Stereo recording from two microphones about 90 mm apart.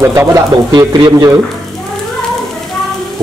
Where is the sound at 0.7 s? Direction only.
50° right (ahead or behind).